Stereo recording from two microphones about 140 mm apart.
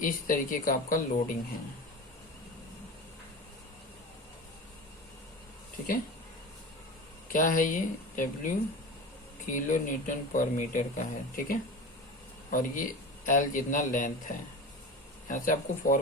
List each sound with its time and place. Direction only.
0.0 s speech: 80° left
7.3 s speech: 70° left (ahead or behind)